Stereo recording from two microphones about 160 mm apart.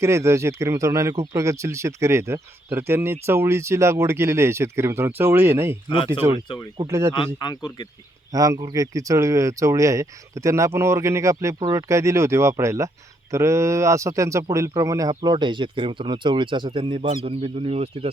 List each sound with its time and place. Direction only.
0.0 s speech: 20° right (ahead or behind)
7.1 s speech: 30° left (ahead or behind)
8.3 s speech: 20° right (ahead or behind); by 18.1 s 40° right (ahead or behind)